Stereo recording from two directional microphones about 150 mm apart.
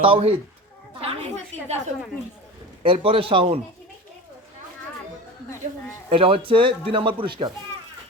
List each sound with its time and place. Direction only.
0.0 s a man's voice: 35° right (ahead or behind)
1.0 s a woman's voice: 50° right (ahead or behind)
2.8 s a man's voice: 40° right (ahead or behind)
6.1 s a man's voice: 35° right (ahead or behind)